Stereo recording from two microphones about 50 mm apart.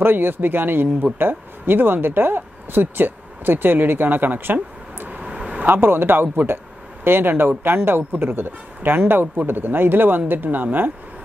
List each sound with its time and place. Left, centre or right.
0.0 s speech: right
5.7 s speech: right